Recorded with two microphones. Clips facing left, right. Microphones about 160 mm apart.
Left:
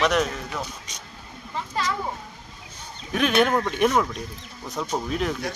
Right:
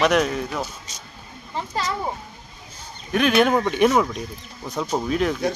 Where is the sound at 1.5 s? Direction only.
30° right (ahead or behind).